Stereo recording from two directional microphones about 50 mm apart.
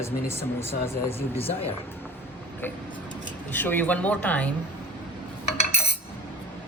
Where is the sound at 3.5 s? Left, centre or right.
Left.